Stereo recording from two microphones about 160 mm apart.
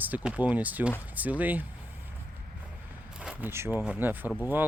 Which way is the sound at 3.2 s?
10° right (ahead or behind).